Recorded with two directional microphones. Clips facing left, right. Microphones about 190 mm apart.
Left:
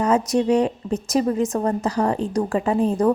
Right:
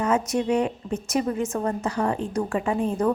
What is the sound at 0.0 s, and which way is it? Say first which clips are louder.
A woman's voice: left 4 dB; 35° left (ahead or behind).